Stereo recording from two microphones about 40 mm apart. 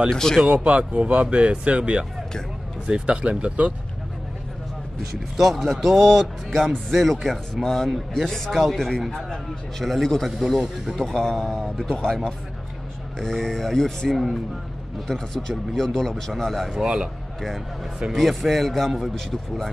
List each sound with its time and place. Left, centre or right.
0.1 s speech: centre
0.5 s speech: right
5.4 s a man's voice: centre
16.8 s speech: centre
18.1 s a man's voice: centre